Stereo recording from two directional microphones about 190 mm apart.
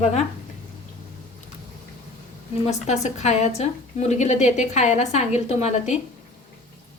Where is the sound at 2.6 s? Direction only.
35° left (ahead or behind).